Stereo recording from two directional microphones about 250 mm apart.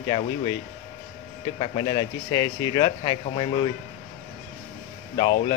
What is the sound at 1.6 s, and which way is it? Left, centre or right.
Speech, centre.